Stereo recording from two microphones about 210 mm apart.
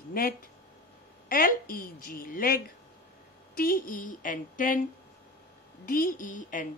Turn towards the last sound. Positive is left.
turn(degrees=40)  # may be behind; listen again after turning